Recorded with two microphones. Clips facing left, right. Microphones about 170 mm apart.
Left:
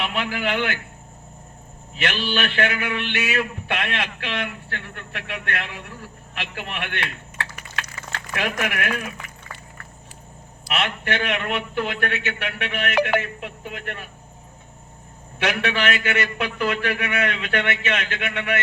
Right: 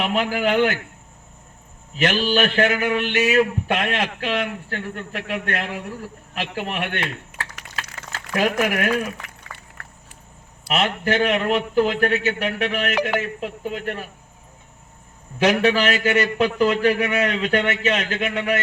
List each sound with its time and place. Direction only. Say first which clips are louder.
0.0 s a man's voice: right 5 dB; 40° right (ahead or behind)
2.0 s a man's voice: right 6 dB; 40° right (ahead or behind)
7.5 s a sound: left 1 dB; 90° right
8.3 s a man's voice: right 6 dB; 35° right (ahead or behind)
10.7 s a man's voice: right 4 dB; 35° right (ahead or behind)
15.4 s a man's voice: right 6 dB; 35° right (ahead or behind)